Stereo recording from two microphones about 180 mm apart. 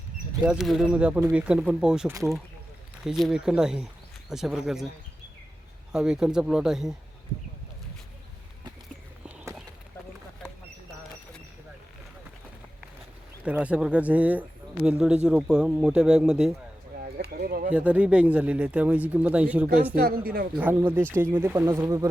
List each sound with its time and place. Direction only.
0.4 s a man's voice: 5° right (ahead or behind)
5.9 s a man's voice: 5° right (ahead or behind)
13.4 s a man's voice: 5° right (ahead or behind)
17.0 s speech: 55° right (ahead or behind)
17.7 s speech: 5° right (ahead or behind)
20.0 s speech: 60° right (ahead or behind)
20.6 s speech: 10° right (ahead or behind)